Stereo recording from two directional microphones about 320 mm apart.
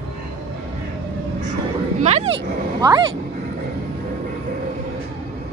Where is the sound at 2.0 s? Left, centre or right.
Right.